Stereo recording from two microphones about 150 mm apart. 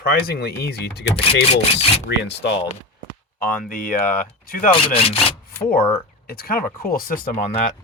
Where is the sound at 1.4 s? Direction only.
40° left (ahead or behind).